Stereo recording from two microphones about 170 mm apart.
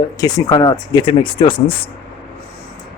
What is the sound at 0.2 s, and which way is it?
Speech, 20° left (ahead or behind).